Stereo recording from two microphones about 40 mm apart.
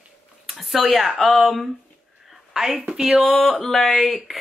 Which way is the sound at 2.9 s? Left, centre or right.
Centre.